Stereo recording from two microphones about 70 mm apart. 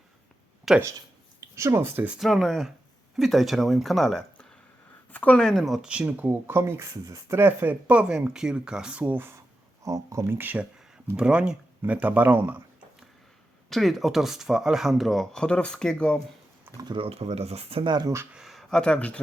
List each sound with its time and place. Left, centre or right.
0.9 s a sound: right
2.1 s speech: centre
5.1 s speech: centre
5.7 s speech: centre
6.5 s speech: right
6.9 s speech: right
7.3 s speech: right; by 9.1 s centre
9.8 s speech: right
10.2 s speech: right
11.2 s speech: centre; by 12.6 s right
13.7 s speech: centre
17.8 s speech: right
18.3 s a sound: centre
18.8 s speech: centre